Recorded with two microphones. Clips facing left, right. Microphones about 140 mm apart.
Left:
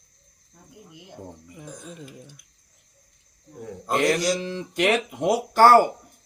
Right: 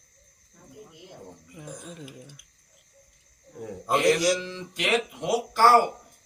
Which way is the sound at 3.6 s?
5° right (ahead or behind).